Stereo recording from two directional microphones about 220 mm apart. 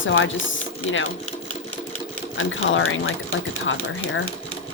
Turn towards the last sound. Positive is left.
turn(degrees=60)  # may be behind; listen again after turning